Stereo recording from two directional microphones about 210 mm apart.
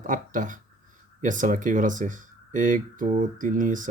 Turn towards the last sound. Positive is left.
turn(degrees=-40)  # may be behind; listen again after turning